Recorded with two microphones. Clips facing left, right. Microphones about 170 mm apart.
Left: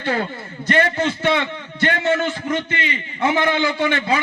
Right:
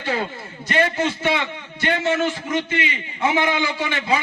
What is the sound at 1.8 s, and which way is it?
A man's voice, 55° left (ahead or behind).